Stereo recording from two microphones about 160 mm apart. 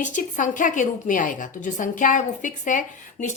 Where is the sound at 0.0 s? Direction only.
50° left (ahead or behind).